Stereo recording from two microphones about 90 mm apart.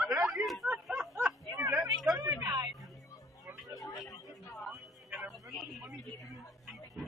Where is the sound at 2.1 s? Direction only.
40° right (ahead or behind).